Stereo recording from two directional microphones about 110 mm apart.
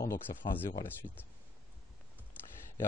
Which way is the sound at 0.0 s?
25° left (ahead or behind).